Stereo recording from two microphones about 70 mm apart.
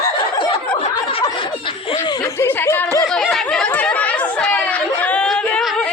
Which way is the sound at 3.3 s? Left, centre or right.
Centre.